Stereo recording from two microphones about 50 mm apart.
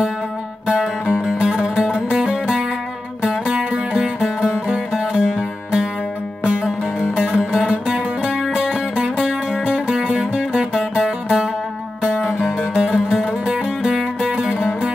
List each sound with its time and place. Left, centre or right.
1.2 s music: centre
12.4 s music: centre